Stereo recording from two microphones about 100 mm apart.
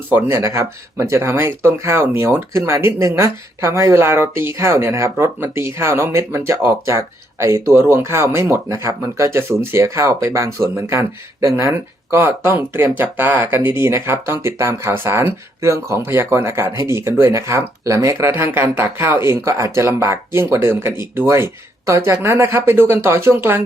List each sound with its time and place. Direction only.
0.1 s speech: 25° right (ahead or behind)